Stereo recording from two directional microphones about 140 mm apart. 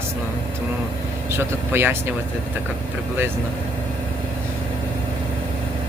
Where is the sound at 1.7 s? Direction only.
15° right (ahead or behind).